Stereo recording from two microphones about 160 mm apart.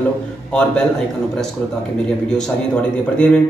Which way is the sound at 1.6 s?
10° left (ahead or behind).